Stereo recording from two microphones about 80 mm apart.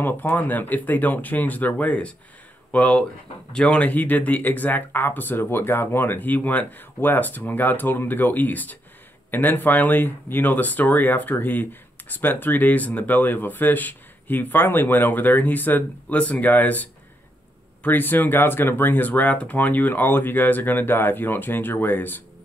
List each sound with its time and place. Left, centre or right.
0.0 s speech: left